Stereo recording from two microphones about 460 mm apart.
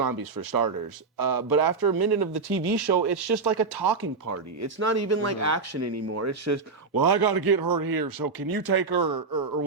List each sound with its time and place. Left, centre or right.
0.0 s speech: right
4.3 s speech: right
6.9 s speech: right